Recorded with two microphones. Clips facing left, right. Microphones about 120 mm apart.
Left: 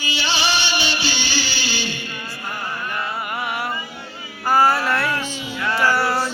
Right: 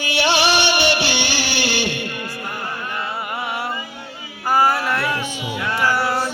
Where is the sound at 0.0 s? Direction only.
65° right (ahead or behind).